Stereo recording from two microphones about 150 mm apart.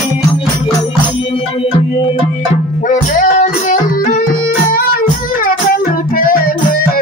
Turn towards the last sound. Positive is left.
turn(degrees=75)  # may be behind; listen again after turning